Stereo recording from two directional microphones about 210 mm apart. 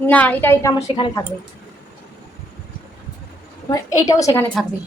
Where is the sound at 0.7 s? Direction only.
30° left (ahead or behind).